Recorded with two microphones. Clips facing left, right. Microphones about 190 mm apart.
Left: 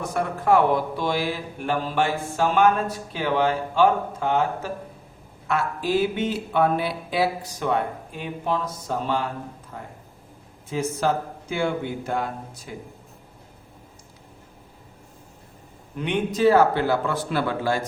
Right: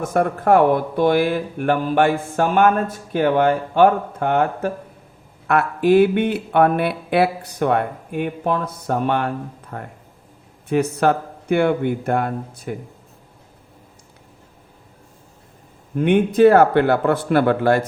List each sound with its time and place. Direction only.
0.0 s speech: 50° right (ahead or behind)
16.0 s speech: 55° right (ahead or behind)